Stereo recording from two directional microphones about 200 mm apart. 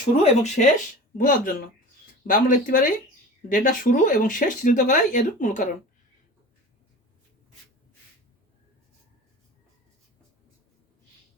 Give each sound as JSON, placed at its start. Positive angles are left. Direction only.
{"t": 0.2, "sound": "speech", "side_deg": 35}